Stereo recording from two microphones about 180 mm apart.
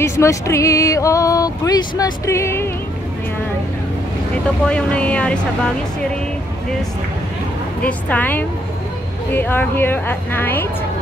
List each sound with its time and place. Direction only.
0.0 s speech: 15° left (ahead or behind)
4.6 s speech: 5° left (ahead or behind)
7.8 s speech: 10° left (ahead or behind)